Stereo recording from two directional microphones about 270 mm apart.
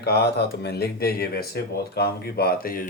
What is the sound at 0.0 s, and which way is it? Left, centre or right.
Speech, left.